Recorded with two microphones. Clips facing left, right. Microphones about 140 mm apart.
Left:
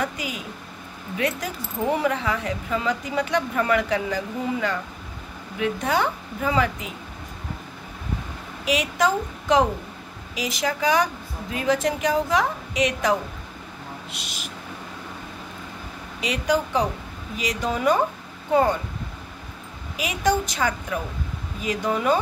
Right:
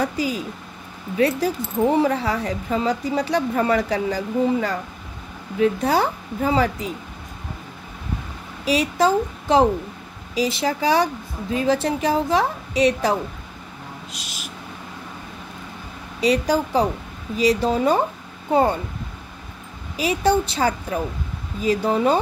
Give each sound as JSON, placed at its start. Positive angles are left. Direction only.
{"t": 0.0, "sound": "a woman's voice", "side_deg": -35}
{"t": 8.6, "sound": "a woman's voice", "side_deg": -30}
{"t": 16.2, "sound": "a woman's voice", "side_deg": -35}
{"t": 20.0, "sound": "a woman's voice", "side_deg": -30}